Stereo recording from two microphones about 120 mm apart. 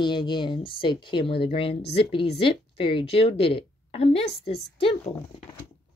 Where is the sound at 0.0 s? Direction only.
40° left (ahead or behind).